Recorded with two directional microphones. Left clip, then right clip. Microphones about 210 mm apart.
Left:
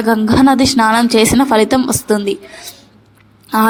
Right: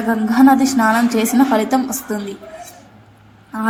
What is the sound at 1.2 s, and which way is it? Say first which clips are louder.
Speech: left 4 dB; 65° left (ahead or behind).